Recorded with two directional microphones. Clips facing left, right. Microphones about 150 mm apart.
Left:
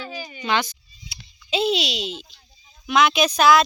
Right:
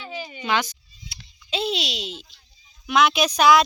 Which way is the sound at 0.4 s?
10° right (ahead or behind).